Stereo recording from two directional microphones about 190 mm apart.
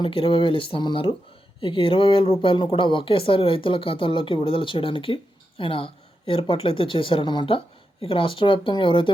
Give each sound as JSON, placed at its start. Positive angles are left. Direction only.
{"t": 0.0, "sound": "speech", "side_deg": 25}